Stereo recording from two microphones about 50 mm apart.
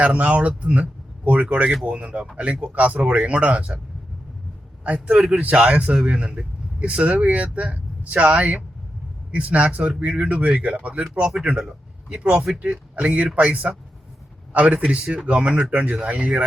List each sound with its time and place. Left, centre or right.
0.0 s speech: right
4.8 s a man's voice: right
12.1 s speech: right